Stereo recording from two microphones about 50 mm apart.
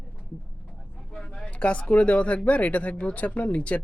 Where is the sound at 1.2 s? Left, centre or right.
Left.